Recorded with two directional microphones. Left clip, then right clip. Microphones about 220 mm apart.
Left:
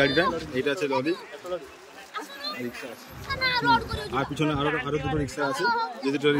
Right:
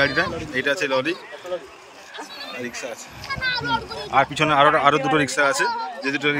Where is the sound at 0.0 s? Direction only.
10° left (ahead or behind).